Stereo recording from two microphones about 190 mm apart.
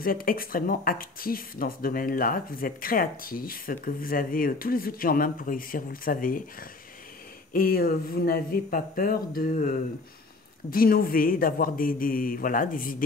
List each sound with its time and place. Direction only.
0.0 s speech: 50° left (ahead or behind)
7.5 s speech: 50° left (ahead or behind)